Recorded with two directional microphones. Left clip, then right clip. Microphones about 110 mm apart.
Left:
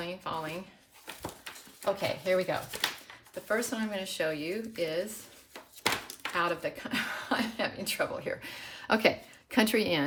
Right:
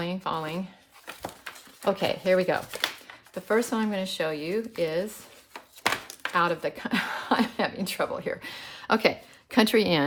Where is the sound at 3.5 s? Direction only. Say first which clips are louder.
Right 6 dB; 45° right (ahead or behind).